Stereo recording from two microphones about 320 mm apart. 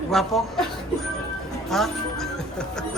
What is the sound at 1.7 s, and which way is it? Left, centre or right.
Music, centre.